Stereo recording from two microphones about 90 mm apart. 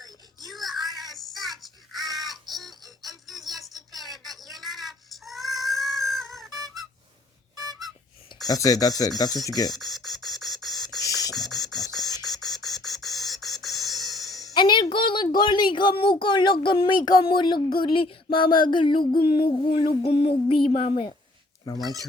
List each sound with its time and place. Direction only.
0.4 s child singing: centre (ahead or behind)
3.0 s a sound: centre (ahead or behind)
8.4 s speech: 40° left (ahead or behind)
9.7 s beatboxing: centre (ahead or behind)
11.0 s beatboxing: 40° left (ahead or behind)
11.3 s beatboxing: centre (ahead or behind)
14.5 s speech: 60° left (ahead or behind)
19.7 s a sound: 90° left; by 21.2 s 70° left (ahead or behind)